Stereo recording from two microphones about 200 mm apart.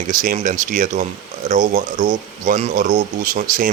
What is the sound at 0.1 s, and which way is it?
Speech, 40° right (ahead or behind).